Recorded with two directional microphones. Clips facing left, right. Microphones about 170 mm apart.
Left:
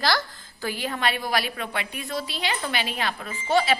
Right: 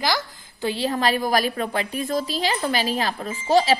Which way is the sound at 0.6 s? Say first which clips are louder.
Right 5 dB; 30° right (ahead or behind).